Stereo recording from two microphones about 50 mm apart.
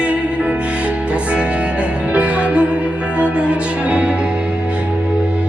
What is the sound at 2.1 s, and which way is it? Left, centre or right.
Music, right.